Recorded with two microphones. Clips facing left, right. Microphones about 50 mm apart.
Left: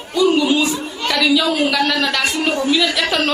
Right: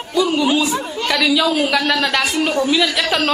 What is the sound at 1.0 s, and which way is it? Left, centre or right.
A woman's voice, centre.